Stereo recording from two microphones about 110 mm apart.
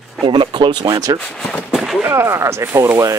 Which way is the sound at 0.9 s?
35° right (ahead or behind).